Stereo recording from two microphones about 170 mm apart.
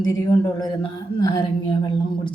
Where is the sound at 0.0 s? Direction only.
20° left (ahead or behind).